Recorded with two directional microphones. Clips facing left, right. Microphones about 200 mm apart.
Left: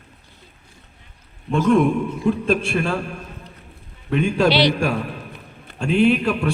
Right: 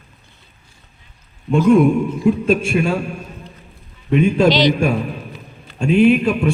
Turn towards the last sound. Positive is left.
turn(degrees=0)  # may be behind; listen again after turning